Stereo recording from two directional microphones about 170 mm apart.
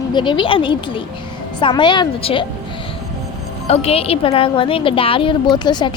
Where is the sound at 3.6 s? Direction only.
35° left (ahead or behind).